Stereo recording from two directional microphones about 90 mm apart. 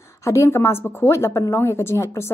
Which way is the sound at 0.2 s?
35° left (ahead or behind).